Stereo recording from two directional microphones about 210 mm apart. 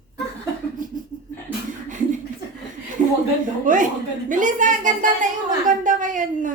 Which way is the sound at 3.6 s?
40° right (ahead or behind).